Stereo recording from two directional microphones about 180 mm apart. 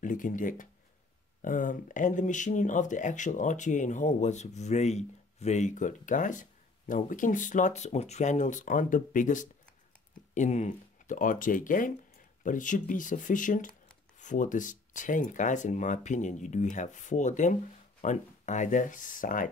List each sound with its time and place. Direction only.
0.0 s speech: 45° left (ahead or behind)